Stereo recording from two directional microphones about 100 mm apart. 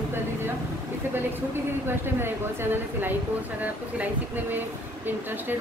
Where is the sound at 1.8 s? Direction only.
25° right (ahead or behind).